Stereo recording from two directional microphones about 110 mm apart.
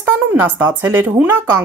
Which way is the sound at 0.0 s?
15° right (ahead or behind).